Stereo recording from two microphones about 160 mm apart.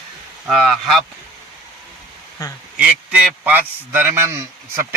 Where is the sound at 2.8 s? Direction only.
10° right (ahead or behind).